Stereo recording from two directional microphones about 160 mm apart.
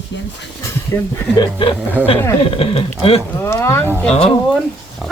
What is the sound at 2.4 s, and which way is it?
Speech, 35° left (ahead or behind).